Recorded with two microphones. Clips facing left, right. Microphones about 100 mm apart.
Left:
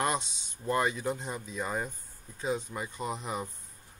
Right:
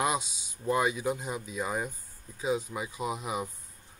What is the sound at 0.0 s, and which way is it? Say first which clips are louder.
Speech: right 1 dB; 5° right (ahead or behind).